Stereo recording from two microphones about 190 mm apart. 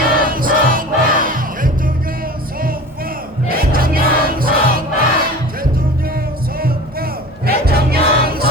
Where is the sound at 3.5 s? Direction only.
50° right (ahead or behind).